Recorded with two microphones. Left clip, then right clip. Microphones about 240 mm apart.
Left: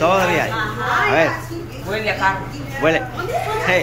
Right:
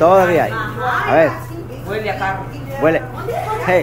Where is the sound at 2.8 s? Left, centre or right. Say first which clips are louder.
Right 2 dB; centre.